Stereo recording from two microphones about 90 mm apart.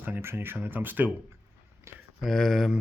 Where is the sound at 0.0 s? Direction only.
25° right (ahead or behind).